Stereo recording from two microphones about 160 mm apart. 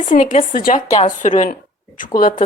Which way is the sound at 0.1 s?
55° left (ahead or behind).